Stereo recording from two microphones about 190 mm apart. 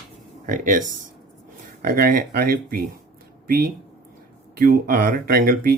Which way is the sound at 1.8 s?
50° right (ahead or behind).